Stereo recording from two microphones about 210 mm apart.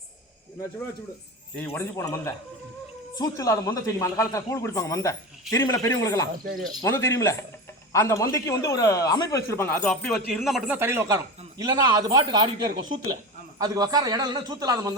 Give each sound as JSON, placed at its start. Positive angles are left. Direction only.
{"t": 1.5, "sound": "a man's voice", "side_deg": 10}